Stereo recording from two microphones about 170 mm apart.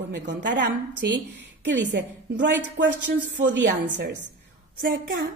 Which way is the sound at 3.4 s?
90° right.